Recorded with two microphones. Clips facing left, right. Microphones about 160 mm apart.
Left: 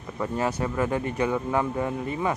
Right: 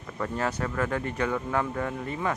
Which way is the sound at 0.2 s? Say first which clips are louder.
Left 3 dB; 15° left (ahead or behind).